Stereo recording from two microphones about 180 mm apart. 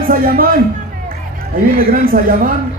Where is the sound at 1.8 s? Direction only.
55° right (ahead or behind).